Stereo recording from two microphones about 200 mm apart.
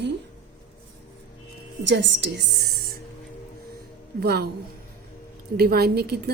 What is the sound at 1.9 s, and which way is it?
Speech, 60° right (ahead or behind).